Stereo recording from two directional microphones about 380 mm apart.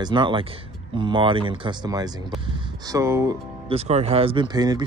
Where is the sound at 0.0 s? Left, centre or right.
Centre.